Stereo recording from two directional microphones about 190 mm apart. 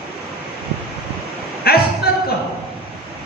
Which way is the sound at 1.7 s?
55° left (ahead or behind).